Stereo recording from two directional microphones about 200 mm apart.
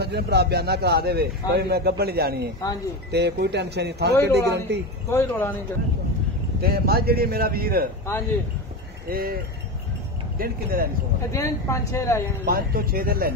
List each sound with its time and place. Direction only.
0.0 s speech: 55° right (ahead or behind)
5.1 s a woman's voice: 10° left (ahead or behind)
6.6 s speech: 50° right (ahead or behind)
9.1 s speech: 50° right (ahead or behind)
11.3 s a woman's voice: 15° left (ahead or behind)
12.4 s speech: 50° right (ahead or behind)